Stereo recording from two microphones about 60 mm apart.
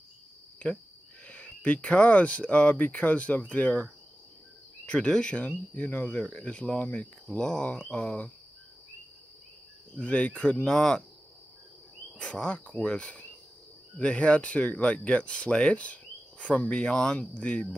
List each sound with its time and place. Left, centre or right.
0.6 s speech: centre
4.8 s speech: centre
7.3 s speech: centre
9.9 s speech: left
10.7 s speech: centre
12.2 s speech: centre